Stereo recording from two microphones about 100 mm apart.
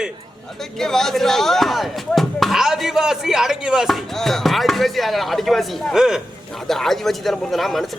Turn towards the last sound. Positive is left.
turn(degrees=0)  # may be behind; listen again after turning